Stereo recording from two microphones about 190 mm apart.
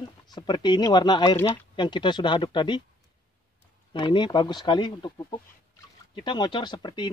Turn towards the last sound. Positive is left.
turn(degrees=20)  # may be behind; listen again after turning